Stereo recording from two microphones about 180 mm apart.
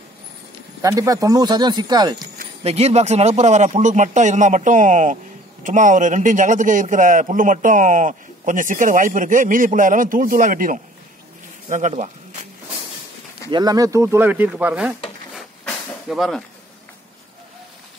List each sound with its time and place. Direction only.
0.8 s speech: 20° right (ahead or behind)
2.6 s speech: 35° right (ahead or behind)
13.5 s speech: 20° right (ahead or behind)
15.3 s vehicle: centre (ahead or behind)